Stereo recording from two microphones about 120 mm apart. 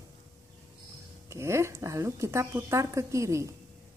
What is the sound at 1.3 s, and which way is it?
A woman's voice, 25° right (ahead or behind).